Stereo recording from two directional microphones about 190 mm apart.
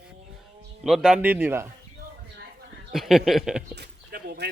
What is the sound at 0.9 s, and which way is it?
Speech, centre (ahead or behind).